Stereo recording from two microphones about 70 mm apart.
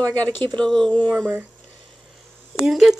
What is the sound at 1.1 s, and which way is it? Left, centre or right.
Speech, right.